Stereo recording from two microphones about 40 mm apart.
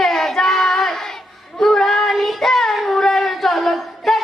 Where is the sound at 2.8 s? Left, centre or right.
Centre.